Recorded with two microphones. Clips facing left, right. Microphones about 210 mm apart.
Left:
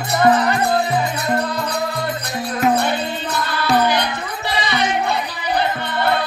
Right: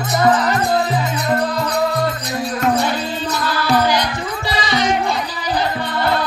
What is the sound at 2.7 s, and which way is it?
Music, 55° left (ahead or behind).